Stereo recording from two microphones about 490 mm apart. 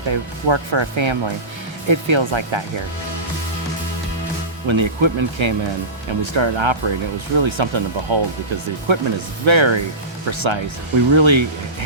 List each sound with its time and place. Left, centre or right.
0.1 s speech: right
4.7 s speech: right